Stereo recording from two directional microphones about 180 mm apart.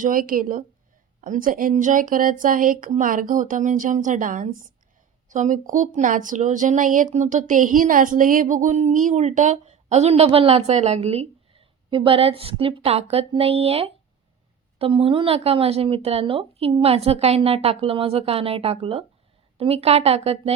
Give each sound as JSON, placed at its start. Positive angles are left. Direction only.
{"t": 0.0, "sound": "speech", "side_deg": -50}